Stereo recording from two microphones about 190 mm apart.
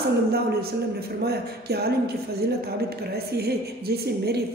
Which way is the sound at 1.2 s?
55° right (ahead or behind).